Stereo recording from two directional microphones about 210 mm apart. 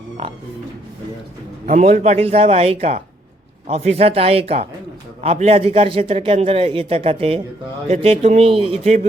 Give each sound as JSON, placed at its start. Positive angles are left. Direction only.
{"t": 1.6, "sound": "a man's voice", "side_deg": -35}